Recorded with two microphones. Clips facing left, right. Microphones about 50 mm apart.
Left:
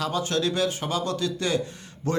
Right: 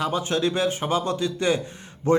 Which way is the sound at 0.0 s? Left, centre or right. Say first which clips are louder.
Right 2 dB; right.